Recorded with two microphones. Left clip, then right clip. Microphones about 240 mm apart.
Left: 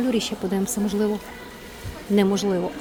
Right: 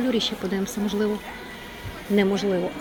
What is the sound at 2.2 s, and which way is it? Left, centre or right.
Speech, centre.